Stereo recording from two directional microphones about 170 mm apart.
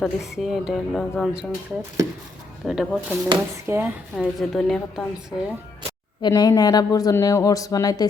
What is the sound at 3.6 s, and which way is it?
Speech, 15° right (ahead or behind).